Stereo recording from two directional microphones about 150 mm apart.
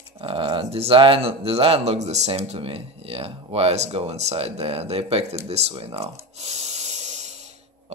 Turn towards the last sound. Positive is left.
turn(degrees=-50)  # may be behind; listen again after turning